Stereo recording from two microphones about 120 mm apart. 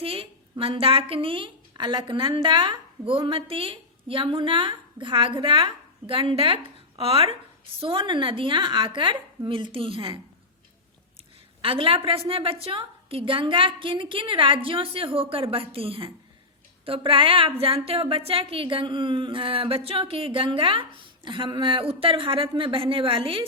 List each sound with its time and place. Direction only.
0.0 s a sound: 50° right (ahead or behind)
0.6 s a woman's voice: 50° right (ahead or behind)
11.6 s a woman's voice: 50° right (ahead or behind)